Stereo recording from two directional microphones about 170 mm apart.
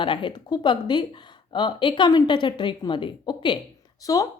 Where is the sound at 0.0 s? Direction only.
30° left (ahead or behind).